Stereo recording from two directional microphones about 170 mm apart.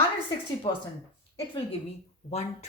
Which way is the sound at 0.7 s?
30° left (ahead or behind).